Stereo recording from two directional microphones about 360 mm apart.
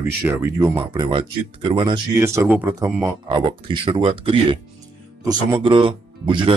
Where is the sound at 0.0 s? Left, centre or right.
Centre.